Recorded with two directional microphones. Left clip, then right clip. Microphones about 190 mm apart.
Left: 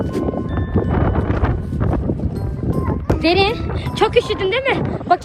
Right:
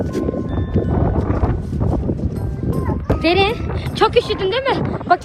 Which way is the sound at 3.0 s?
45° left (ahead or behind).